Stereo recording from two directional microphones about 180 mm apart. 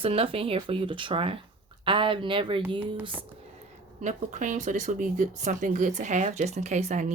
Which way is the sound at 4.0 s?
45° right (ahead or behind).